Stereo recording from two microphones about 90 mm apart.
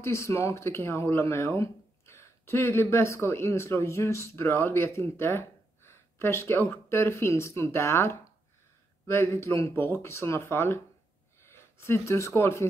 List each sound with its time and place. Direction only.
0.0 s speech: 30° left (ahead or behind)